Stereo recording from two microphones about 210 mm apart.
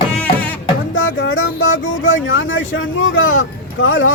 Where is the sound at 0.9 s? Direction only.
70° left (ahead or behind).